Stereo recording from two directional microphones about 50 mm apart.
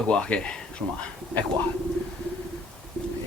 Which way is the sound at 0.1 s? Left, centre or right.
Centre.